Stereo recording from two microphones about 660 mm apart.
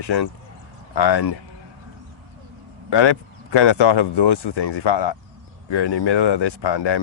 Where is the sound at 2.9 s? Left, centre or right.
Left.